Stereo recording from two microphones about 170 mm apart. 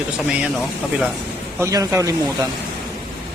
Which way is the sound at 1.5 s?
20° right (ahead or behind).